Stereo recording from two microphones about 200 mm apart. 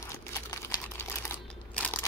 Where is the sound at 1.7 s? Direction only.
5° left (ahead or behind).